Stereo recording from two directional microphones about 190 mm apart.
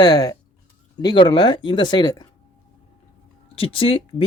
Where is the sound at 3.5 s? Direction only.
30° left (ahead or behind).